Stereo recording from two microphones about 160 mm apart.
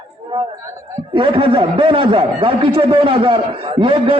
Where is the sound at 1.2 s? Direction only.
30° right (ahead or behind).